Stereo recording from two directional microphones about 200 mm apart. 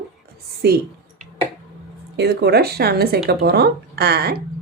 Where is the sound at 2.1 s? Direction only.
55° right (ahead or behind).